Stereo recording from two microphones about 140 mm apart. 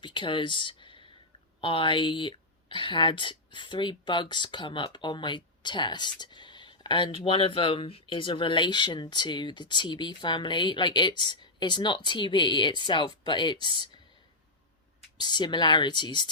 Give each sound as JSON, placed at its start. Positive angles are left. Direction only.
{"t": 0.0, "sound": "a sound", "side_deg": 35}
{"t": 1.6, "sound": "a woman's voice", "side_deg": 35}
{"t": 15.2, "sound": "a woman's voice", "side_deg": 30}